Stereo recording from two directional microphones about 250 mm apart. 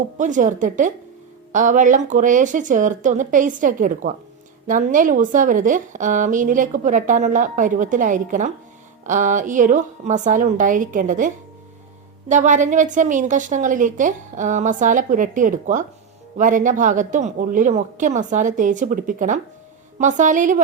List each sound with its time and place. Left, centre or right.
0.2 s a woman's voice: right
12.3 s a woman's voice: right